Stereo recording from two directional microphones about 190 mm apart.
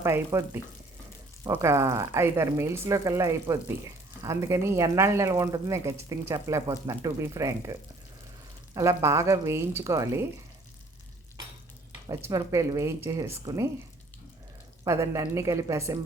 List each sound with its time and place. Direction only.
0.0 s speech: 15° right (ahead or behind)
12.0 s speech: 20° right (ahead or behind)
14.8 s speech: 15° right (ahead or behind)